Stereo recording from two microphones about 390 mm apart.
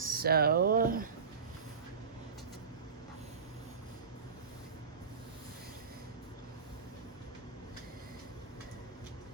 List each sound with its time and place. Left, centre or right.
0.0 s speech: right